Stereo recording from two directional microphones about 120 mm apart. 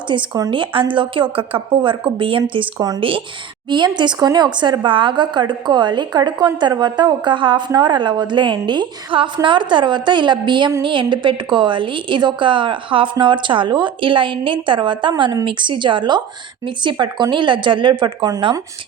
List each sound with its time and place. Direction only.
0.1 s a woman's voice: 45° right (ahead or behind)
2.7 s speech: 30° right (ahead or behind)
3.0 s a woman's voice: 45° right (ahead or behind)